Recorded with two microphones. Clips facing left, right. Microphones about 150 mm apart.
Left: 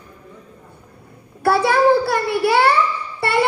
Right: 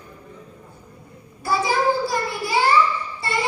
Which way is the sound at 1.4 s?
65° left (ahead or behind).